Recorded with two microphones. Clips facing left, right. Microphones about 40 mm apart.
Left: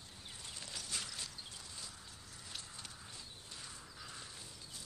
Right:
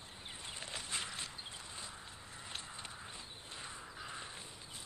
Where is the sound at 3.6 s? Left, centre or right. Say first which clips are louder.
Right 6 dB; right.